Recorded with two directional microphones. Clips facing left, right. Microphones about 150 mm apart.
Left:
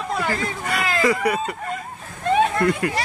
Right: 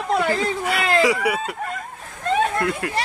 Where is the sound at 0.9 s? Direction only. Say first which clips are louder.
Even; 10° right (ahead or behind).